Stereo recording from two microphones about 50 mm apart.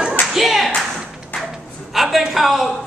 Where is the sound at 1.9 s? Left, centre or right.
Centre.